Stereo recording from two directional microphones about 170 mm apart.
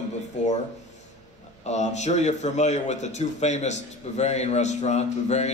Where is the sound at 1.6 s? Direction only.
40° left (ahead or behind).